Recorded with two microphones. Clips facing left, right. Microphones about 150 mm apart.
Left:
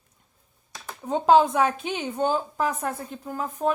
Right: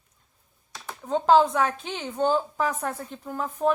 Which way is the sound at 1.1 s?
15° left (ahead or behind).